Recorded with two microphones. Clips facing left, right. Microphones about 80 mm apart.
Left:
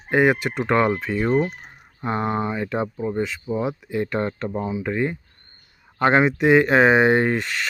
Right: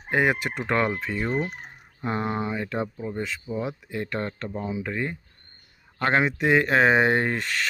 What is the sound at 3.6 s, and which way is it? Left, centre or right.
Speech, centre.